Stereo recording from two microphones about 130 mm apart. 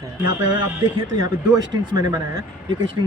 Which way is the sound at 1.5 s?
30° right (ahead or behind).